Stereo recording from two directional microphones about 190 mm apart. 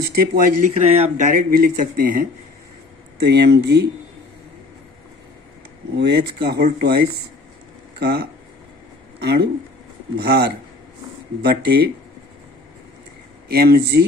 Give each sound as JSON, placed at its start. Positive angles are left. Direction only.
{"t": 0.0, "sound": "speech", "side_deg": -50}
{"t": 3.2, "sound": "speech", "side_deg": -60}
{"t": 6.0, "sound": "speech", "side_deg": -60}
{"t": 13.5, "sound": "speech", "side_deg": -55}